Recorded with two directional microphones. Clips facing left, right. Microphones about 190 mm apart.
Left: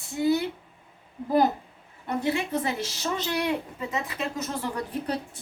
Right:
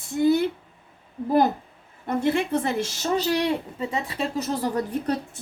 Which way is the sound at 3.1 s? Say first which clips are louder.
Right 4 dB; 35° right (ahead or behind).